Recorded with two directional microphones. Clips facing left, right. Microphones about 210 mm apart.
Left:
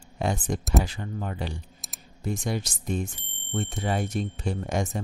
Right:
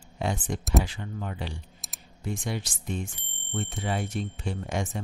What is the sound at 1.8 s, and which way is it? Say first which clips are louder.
Computer keyboard: left 1 dB; centre (ahead or behind).